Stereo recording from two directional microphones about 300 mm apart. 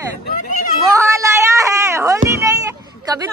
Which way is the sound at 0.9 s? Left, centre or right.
Centre.